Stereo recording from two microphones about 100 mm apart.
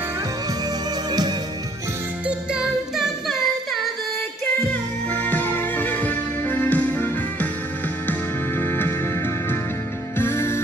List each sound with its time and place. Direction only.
2.2 s music: 5° right (ahead or behind)
5.1 s music: 15° left (ahead or behind)